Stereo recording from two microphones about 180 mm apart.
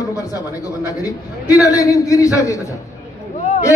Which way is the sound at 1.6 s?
20° left (ahead or behind).